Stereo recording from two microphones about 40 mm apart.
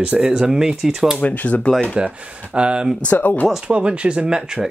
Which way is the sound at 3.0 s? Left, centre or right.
Left.